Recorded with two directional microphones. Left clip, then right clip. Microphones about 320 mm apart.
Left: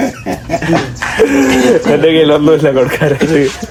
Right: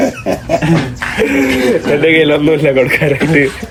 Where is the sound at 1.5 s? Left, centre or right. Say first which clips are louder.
Left 3 dB; left.